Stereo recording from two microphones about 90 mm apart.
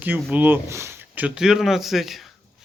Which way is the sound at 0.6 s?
30° right (ahead or behind).